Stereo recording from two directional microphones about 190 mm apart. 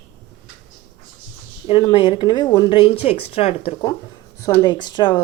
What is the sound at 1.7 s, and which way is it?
Speech, 25° left (ahead or behind).